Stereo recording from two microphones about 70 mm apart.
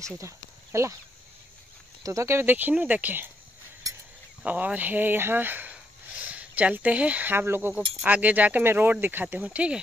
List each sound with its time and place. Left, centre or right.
0.7 s speech: right
2.0 s speech: right
2.7 s speech: right
4.5 s speech: right
7.3 s speech: right
7.7 s speech: right